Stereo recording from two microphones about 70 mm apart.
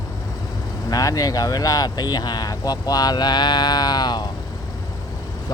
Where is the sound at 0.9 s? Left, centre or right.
Left.